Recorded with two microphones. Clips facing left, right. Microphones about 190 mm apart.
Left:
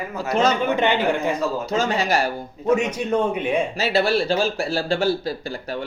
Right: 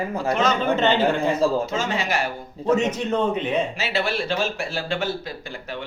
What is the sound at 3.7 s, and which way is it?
Speech, 35° left (ahead or behind).